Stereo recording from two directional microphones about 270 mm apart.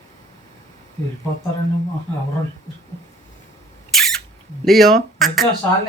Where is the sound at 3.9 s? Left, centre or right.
Centre.